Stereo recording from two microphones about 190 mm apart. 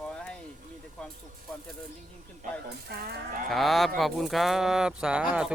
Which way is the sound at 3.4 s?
Centre (ahead or behind).